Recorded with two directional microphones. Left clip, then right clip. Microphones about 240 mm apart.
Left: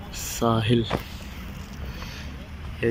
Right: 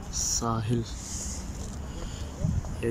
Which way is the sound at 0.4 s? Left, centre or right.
Centre.